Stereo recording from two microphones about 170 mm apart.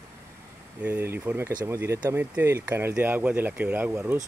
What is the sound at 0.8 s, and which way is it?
Speech, 10° right (ahead or behind).